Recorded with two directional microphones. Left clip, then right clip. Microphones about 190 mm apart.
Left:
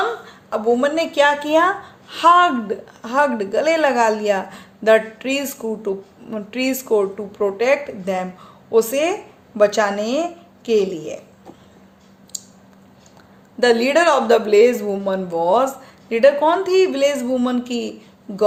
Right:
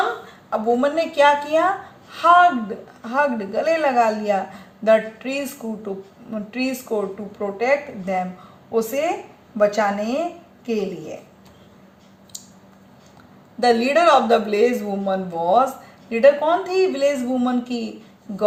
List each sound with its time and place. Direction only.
0.5 s a woman's voice: 30° left (ahead or behind)
13.6 s a woman's voice: 30° left (ahead or behind)